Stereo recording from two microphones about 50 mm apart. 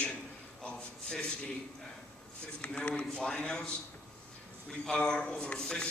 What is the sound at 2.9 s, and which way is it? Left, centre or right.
A man's voice, left.